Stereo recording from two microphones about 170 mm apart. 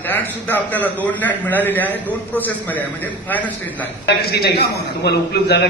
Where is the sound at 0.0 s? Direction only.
10° left (ahead or behind).